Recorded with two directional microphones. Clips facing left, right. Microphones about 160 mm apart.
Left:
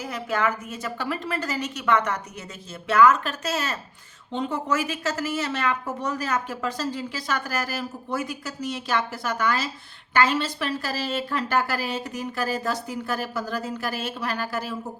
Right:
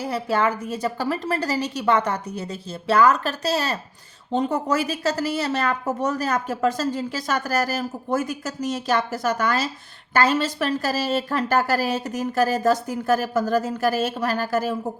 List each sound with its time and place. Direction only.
0.0 s a woman's voice: 30° right (ahead or behind)